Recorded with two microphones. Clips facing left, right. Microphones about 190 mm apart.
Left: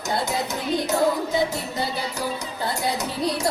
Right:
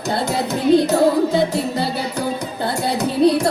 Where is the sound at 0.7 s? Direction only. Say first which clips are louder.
Right 6 dB; 60° right (ahead or behind).